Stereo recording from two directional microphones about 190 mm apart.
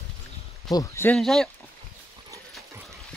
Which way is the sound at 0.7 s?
15° left (ahead or behind).